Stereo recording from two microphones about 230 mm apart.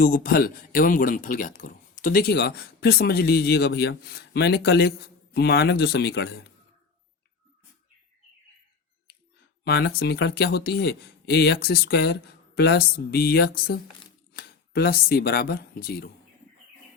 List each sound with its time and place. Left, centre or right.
0.0 s speech: left
9.6 s speech: left